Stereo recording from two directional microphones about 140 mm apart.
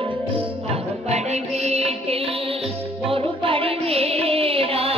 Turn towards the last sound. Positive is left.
turn(degrees=-45)  # may be behind; listen again after turning